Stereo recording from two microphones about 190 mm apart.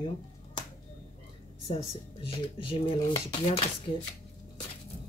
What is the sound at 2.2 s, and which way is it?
Speech, 30° left (ahead or behind).